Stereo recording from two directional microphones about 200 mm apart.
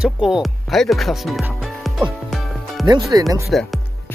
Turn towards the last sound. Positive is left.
turn(degrees=0)  # may be behind; listen again after turning